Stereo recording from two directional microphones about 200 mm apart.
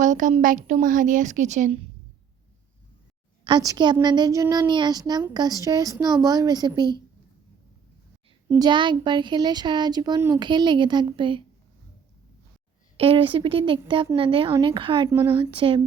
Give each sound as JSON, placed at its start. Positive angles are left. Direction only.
{"t": 0.0, "sound": "a woman's voice", "side_deg": -40}
{"t": 3.4, "sound": "speech", "side_deg": -20}
{"t": 8.4, "sound": "speech", "side_deg": -20}
{"t": 13.0, "sound": "speech", "side_deg": -25}
{"t": 15.1, "sound": "speech", "side_deg": -10}
{"t": 15.4, "sound": "speech", "side_deg": -25}